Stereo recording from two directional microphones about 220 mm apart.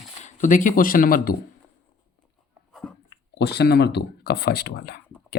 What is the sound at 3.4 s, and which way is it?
Speech, 45° left (ahead or behind).